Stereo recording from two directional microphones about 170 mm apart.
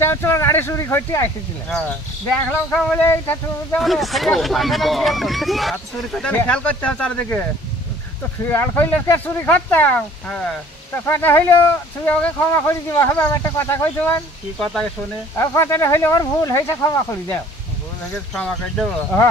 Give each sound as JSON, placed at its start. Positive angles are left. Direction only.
{"t": 0.0, "sound": "speech", "side_deg": 15}
{"t": 2.7, "sound": "speech", "side_deg": 5}
{"t": 3.8, "sound": "speech", "side_deg": 0}
{"t": 8.5, "sound": "speech", "side_deg": 10}
{"t": 14.6, "sound": "speech", "side_deg": 5}
{"t": 15.3, "sound": "speech", "side_deg": 15}
{"t": 18.1, "sound": "speech", "side_deg": 5}